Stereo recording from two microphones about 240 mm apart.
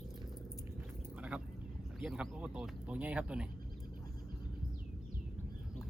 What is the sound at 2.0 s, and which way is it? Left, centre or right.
Speech, centre.